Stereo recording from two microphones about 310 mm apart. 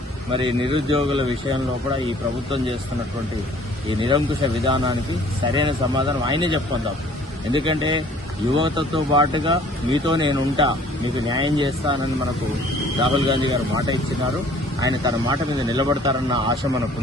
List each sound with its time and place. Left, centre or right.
0.3 s speech: centre
4.6 s speech: centre
13.0 s speech: centre